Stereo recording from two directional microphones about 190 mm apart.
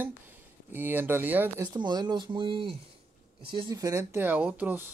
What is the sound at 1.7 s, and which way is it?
Speech, 20° right (ahead or behind).